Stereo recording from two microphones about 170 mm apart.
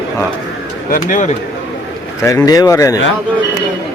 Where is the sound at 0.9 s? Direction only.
50° left (ahead or behind).